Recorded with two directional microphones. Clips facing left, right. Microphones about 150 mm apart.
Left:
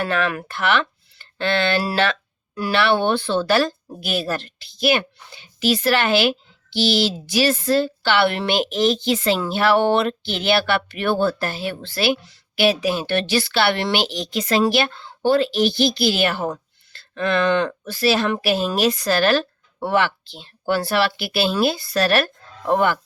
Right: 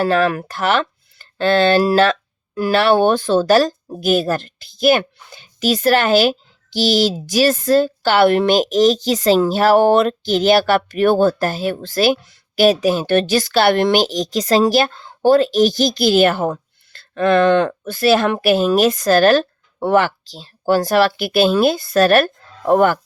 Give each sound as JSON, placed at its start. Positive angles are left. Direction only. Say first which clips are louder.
{"t": 0.0, "sound": "speech", "louder": "right 6 dB", "side_deg": -35}